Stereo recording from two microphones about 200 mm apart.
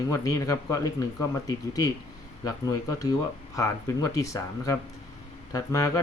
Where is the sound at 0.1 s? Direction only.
15° left (ahead or behind).